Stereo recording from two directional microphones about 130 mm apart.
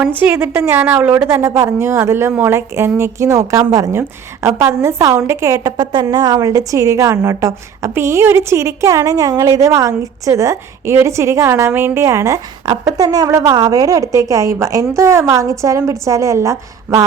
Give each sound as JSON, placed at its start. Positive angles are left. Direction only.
{"t": 0.0, "sound": "a woman's voice", "side_deg": -15}